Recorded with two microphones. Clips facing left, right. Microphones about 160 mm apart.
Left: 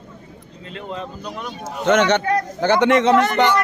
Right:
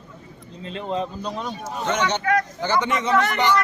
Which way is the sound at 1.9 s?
70° left (ahead or behind).